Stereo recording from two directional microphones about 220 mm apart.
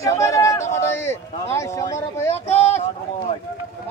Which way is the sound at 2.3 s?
30° left (ahead or behind).